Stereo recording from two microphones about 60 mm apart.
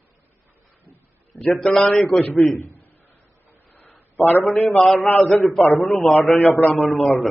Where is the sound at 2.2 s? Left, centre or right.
Left.